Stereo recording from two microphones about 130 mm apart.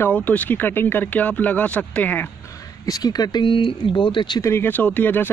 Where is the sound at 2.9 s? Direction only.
30° left (ahead or behind).